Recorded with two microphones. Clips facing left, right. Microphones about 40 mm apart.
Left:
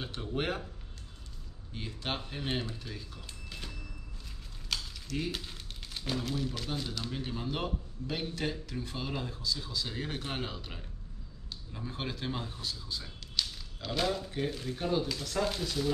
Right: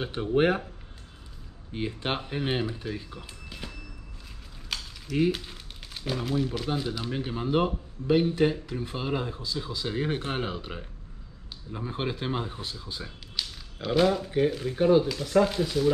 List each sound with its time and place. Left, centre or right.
0.0 s speech: right
1.7 s speech: right
3.4 s a sound: centre
5.3 s crumpling: centre
6.1 s speech: centre
13.4 s a sound: centre
13.8 s speech: centre